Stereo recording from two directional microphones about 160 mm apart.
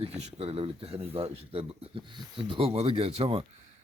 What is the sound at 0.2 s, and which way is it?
Speech, 40° right (ahead or behind).